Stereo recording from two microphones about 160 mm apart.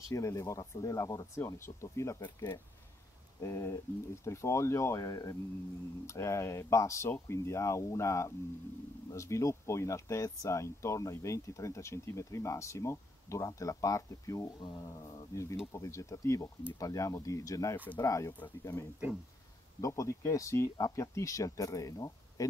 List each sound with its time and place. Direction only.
0.1 s speech: 20° left (ahead or behind)